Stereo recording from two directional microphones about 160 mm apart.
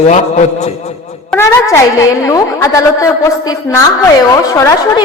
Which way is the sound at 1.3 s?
20° left (ahead or behind).